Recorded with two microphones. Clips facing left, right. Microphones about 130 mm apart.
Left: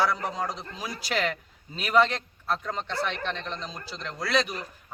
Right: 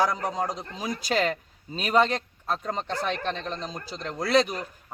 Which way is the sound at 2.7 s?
40° right (ahead or behind).